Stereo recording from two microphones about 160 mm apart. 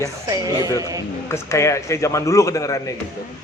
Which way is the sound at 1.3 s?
15° left (ahead or behind).